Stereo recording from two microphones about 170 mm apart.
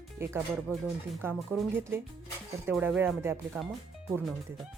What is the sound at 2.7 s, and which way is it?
Speech, 10° right (ahead or behind).